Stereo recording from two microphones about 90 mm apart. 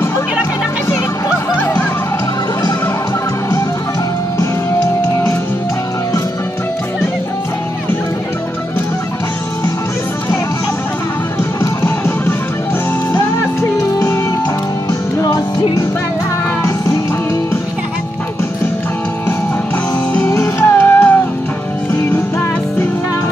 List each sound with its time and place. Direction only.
1.6 s music: 20° left (ahead or behind)
13.1 s music: 30° left (ahead or behind)
20.2 s music: 30° left (ahead or behind)